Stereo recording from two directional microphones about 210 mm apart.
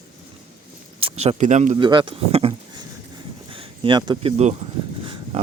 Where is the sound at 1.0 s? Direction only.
30° right (ahead or behind).